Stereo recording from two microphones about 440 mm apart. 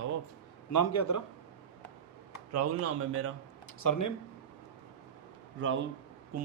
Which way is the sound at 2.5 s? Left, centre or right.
Right.